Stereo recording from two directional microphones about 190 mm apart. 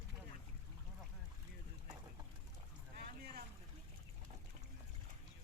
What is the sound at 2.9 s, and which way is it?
Boat, 50° right (ahead or behind).